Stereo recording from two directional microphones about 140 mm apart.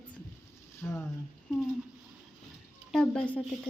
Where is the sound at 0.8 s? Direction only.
15° left (ahead or behind).